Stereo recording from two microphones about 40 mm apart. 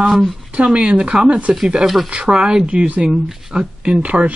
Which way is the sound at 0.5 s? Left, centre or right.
Right.